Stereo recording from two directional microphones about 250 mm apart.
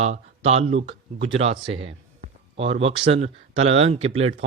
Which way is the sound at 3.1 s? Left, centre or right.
Right.